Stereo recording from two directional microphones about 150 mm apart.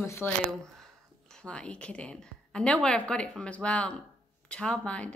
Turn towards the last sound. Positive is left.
turn(degrees=10)  # may be behind; listen again after turning